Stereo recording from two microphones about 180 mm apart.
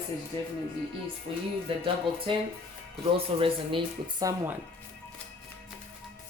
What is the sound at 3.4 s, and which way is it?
Speech, 30° right (ahead or behind).